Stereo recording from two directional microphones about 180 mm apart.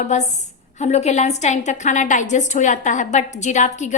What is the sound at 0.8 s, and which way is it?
A woman's voice, 40° left (ahead or behind).